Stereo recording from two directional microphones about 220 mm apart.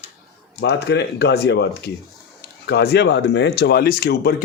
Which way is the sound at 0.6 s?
50° left (ahead or behind).